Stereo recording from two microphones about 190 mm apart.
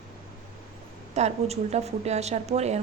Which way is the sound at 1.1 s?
35° right (ahead or behind).